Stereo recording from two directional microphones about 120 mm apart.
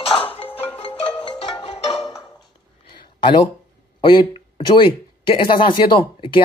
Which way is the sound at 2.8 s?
40° left (ahead or behind).